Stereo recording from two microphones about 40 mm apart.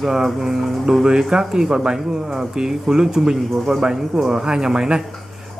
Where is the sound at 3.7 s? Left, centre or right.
Right.